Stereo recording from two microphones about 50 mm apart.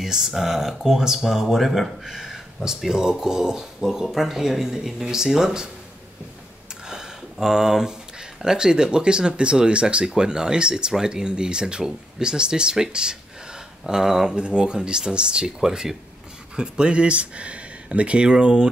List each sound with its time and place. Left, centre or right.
0.0 s speech: centre
6.9 s a sound: centre
8.4 s speech: centre